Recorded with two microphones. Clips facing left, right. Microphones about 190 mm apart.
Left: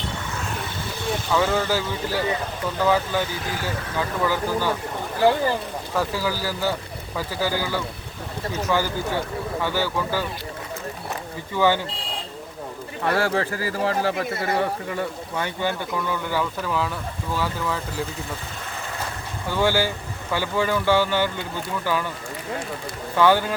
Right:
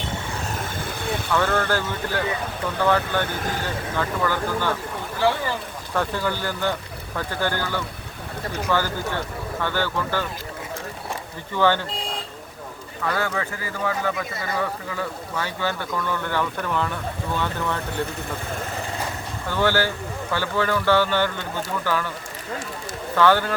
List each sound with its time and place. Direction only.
1.4 s speech: 10° left (ahead or behind)
3.2 s speech: 50° right (ahead or behind)
3.9 s speech: 10° left (ahead or behind)
5.9 s speech: 5° left (ahead or behind)
11.5 s speech: 10° left (ahead or behind)
13.1 s speech: 30° left (ahead or behind); by 18.0 s 5° left (ahead or behind)
19.5 s speech: 10° left (ahead or behind)
23.1 s speech: 15° left (ahead or behind)